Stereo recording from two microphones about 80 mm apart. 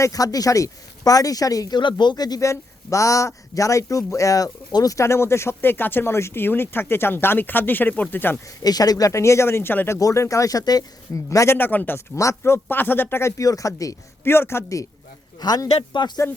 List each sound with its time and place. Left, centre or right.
0.0 s speech: left
1.8 s speech: left
2.4 s a man's voice: left
8.6 s a man's voice: left
10.0 s speech: left
11.5 s a man's voice: left
11.9 s a man's voice: left
14.3 s a man's voice: left
15.4 s speech: left